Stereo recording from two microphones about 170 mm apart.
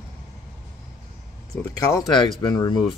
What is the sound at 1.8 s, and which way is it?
Speech, 20° left (ahead or behind).